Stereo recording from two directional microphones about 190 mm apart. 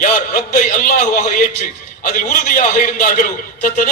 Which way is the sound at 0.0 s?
45° left (ahead or behind).